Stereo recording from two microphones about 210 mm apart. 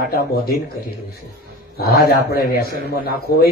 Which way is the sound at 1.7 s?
45° left (ahead or behind).